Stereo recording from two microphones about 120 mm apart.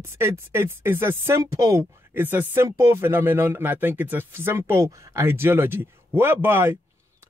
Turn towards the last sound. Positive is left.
turn(degrees=-20)  # may be behind; listen again after turning